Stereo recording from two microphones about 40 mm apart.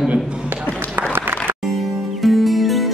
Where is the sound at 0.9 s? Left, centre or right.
Right.